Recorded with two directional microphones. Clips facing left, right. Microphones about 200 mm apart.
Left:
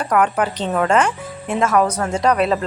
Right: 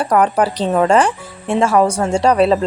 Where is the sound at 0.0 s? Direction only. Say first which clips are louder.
Right 3 dB; 35° right (ahead or behind).